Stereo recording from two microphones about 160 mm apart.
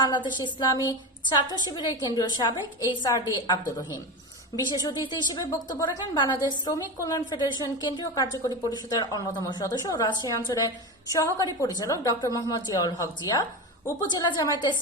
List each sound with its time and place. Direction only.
0.0 s a woman's voice: 30° left (ahead or behind)
4.7 s a woman's voice: 25° left (ahead or behind)